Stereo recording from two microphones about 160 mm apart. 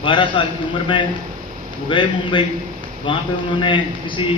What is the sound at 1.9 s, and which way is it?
A man's voice, 30° left (ahead or behind).